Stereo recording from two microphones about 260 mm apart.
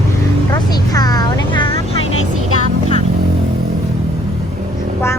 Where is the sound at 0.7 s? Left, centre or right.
Centre.